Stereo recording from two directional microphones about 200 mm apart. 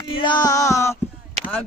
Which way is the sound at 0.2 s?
20° left (ahead or behind).